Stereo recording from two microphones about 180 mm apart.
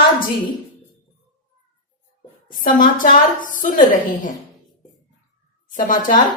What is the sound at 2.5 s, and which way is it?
A woman's voice, 50° left (ahead or behind).